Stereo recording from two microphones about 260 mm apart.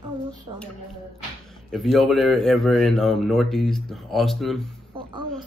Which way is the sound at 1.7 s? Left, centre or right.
Centre.